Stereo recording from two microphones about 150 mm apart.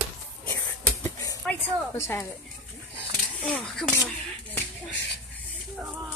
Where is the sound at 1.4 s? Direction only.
15° left (ahead or behind).